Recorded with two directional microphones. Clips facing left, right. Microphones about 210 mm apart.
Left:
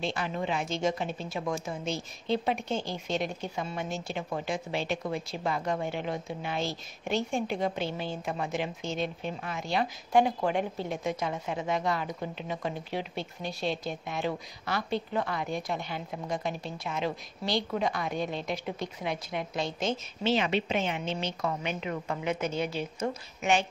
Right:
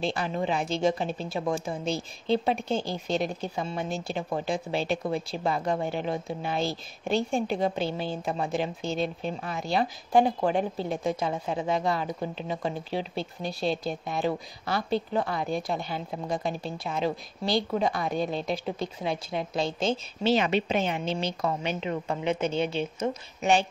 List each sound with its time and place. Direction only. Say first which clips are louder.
0.0 s a woman's voice: right 3 dB; 35° right (ahead or behind)